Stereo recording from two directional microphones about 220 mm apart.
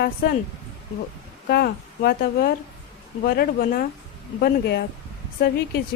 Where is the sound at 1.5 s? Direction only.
45° left (ahead or behind).